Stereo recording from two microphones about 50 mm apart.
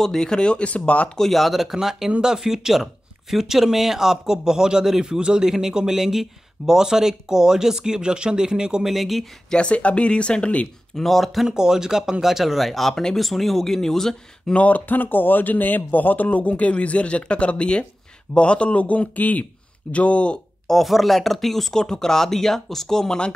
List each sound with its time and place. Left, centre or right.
0.0 s speech: centre
1.1 s speech: centre
8.9 s speech: centre
9.5 s speech: left
11.0 s speech: centre
11.4 s speech: centre
14.5 s speech: left
20.6 s speech: centre